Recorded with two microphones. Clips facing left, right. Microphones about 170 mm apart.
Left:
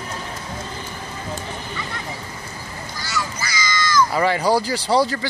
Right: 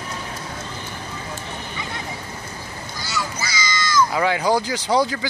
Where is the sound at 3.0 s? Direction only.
20° right (ahead or behind).